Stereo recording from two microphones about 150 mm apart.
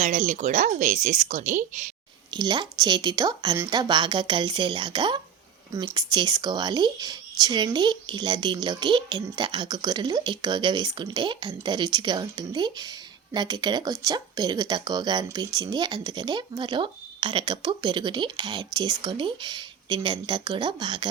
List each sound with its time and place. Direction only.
0.0 s speech: 55° right (ahead or behind)
2.3 s speech: 30° right (ahead or behind)